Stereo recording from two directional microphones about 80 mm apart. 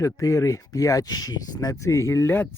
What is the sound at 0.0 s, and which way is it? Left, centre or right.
Speech, left.